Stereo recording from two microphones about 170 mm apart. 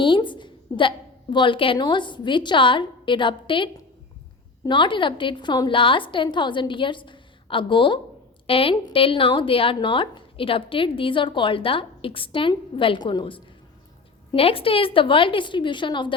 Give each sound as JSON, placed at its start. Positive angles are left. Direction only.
{"t": 0.0, "sound": "a woman's voice", "side_deg": 30}